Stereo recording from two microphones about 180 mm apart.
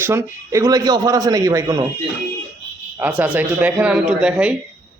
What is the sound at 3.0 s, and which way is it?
Speech, 10° right (ahead or behind).